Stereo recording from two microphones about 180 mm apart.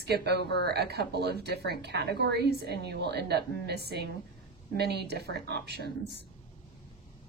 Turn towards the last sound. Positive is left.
turn(degrees=-65)  # may be behind; listen again after turning